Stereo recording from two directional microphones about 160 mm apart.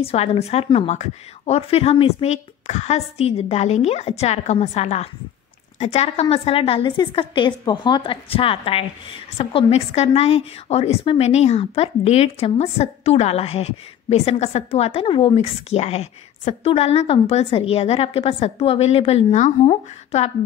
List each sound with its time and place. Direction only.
0.0 s a woman's voice: 40° left (ahead or behind)